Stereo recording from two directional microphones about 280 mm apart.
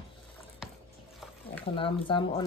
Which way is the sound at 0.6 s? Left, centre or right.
Centre.